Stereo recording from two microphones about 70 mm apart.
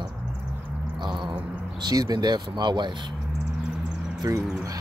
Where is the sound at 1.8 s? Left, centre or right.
Right.